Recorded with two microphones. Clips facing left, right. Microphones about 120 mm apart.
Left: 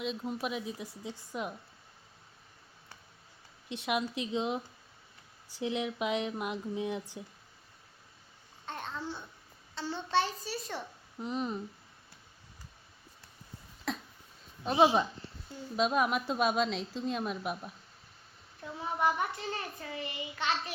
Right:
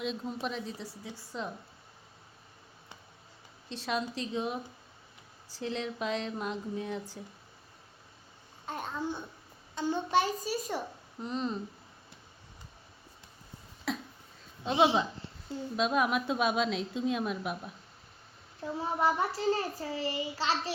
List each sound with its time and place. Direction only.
0.0 s a woman's voice: centre (ahead or behind)
3.7 s speech: 15° left (ahead or behind)
8.6 s a child's voice: 10° right (ahead or behind)
11.2 s speech: 15° left (ahead or behind)
13.9 s a sound: 5° right (ahead or behind)
15.7 s a woman's voice: centre (ahead or behind)
18.6 s a child's voice: 30° right (ahead or behind)